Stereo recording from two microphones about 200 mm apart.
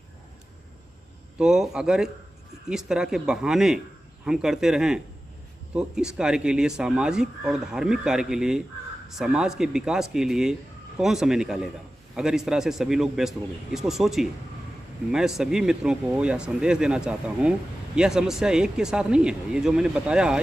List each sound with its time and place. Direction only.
1.4 s speech: 5° right (ahead or behind)